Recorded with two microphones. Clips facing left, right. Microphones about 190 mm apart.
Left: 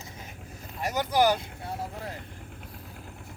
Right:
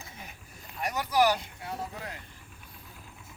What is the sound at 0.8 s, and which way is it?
Speech, 25° left (ahead or behind).